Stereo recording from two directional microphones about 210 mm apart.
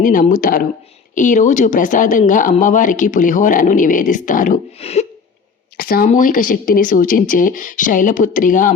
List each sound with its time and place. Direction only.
0.0 s speech: 40° left (ahead or behind)
5.7 s speech: 45° left (ahead or behind)